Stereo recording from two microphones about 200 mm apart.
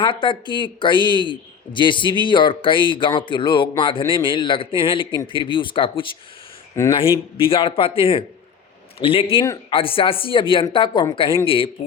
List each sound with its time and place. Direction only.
0.0 s speech: 25° left (ahead or behind)
7.3 s speech: 25° left (ahead or behind)